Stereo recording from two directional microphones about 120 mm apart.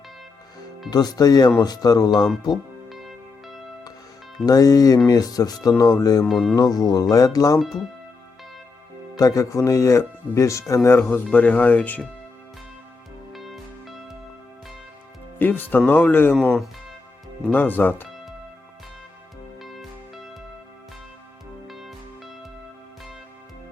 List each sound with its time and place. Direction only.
0.9 s speech: 35° left (ahead or behind)
2.9 s music: centre (ahead or behind)
4.4 s speech: 30° left (ahead or behind)
6.2 s speech: centre (ahead or behind)
6.6 s speech: 30° left (ahead or behind)
7.6 s speech: centre (ahead or behind)
9.1 s speech: 30° left (ahead or behind)
11.1 s speech: 10° left (ahead or behind)
13.3 s music: centre (ahead or behind)
15.4 s speech: 15° left (ahead or behind)
19.6 s music: centre (ahead or behind)
21.7 s music: centre (ahead or behind)